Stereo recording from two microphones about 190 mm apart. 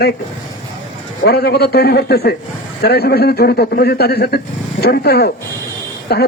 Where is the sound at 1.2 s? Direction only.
55° left (ahead or behind).